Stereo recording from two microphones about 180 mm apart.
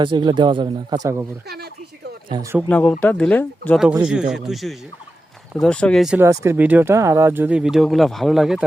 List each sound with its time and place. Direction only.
0.0 s speech: 25° right (ahead or behind)
1.5 s a sound: 60° right (ahead or behind)
2.3 s speech: 20° right (ahead or behind)
2.6 s speech: 10° left (ahead or behind)
4.0 s speech: 5° right (ahead or behind)
6.1 s speech: 15° right (ahead or behind)